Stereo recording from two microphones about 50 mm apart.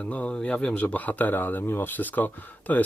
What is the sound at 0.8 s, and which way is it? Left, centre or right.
Speech, left.